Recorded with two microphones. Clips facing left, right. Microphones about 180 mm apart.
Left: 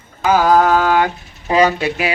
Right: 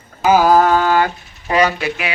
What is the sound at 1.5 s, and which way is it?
Speech, 25° left (ahead or behind).